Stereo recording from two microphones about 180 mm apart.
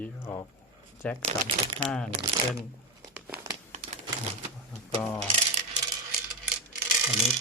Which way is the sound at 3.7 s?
40° right (ahead or behind).